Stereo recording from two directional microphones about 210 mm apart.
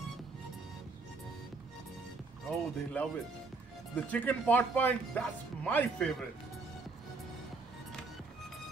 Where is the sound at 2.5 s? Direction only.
5° left (ahead or behind).